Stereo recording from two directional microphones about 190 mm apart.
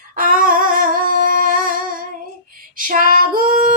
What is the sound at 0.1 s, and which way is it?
Humming, 45° right (ahead or behind).